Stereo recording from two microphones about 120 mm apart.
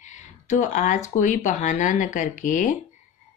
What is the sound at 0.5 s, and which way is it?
Speech, 80° left.